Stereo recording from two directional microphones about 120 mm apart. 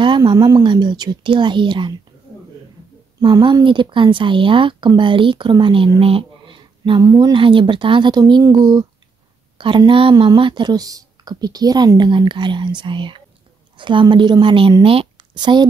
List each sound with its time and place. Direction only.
0.0 s speech: 40° right (ahead or behind)
3.2 s speech: 35° right (ahead or behind)
5.9 s a sound: 50° right (ahead or behind)
7.0 s speech: 30° right (ahead or behind)
7.3 s speech: 45° right (ahead or behind)
9.6 s speech: 45° right (ahead or behind)